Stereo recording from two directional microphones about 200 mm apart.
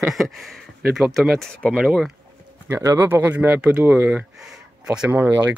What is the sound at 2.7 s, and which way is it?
Speech, 15° right (ahead or behind).